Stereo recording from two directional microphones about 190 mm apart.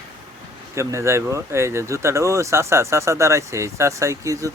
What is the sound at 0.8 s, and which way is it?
Speech, 15° right (ahead or behind).